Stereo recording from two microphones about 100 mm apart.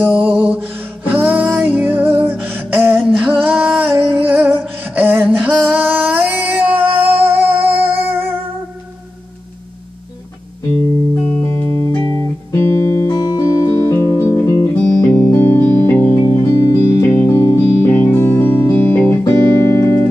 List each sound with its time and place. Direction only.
0.1 s music: 5° right (ahead or behind)
0.5 s music: 20° right (ahead or behind)
3.0 s female singing: 15° right (ahead or behind)
3.4 s music: 15° right (ahead or behind)
11.4 s music: 25° left (ahead or behind)